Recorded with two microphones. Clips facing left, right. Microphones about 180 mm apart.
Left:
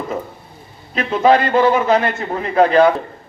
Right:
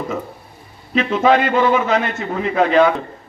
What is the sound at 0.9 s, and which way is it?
A man's voice, 35° left (ahead or behind).